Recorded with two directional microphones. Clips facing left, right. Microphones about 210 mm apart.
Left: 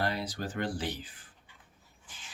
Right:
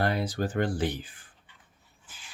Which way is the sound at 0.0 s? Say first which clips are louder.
Right 5 dB; 50° right (ahead or behind).